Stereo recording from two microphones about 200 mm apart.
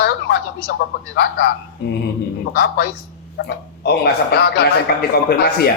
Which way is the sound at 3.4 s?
55° left (ahead or behind).